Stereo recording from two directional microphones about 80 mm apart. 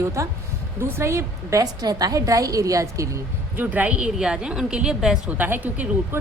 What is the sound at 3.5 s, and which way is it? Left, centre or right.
A woman's voice, right.